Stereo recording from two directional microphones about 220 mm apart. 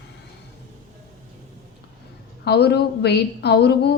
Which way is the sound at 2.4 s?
50° left (ahead or behind).